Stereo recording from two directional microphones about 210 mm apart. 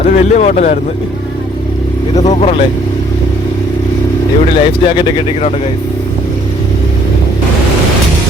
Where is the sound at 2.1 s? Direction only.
30° left (ahead or behind).